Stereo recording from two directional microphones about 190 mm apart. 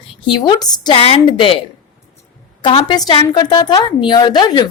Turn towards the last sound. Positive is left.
turn(degrees=25)  # may be behind; listen again after turning